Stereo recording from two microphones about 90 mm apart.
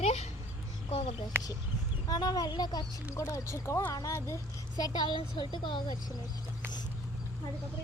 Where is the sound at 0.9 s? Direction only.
90° left.